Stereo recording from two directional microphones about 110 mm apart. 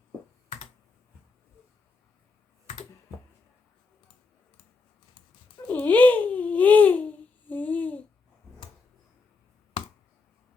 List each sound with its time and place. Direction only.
5.6 s babbling: 15° left (ahead or behind)